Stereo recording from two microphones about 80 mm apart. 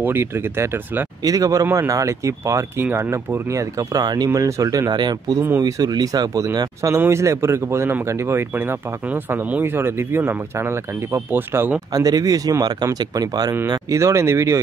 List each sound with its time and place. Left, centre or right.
0.0 s speech: right
1.2 s speech: right
4.0 s speech: right
4.3 s speech: right
4.9 s speech: right
5.6 s speech: right
7.0 s speech: right
11.9 s speech: right
13.7 s speech: right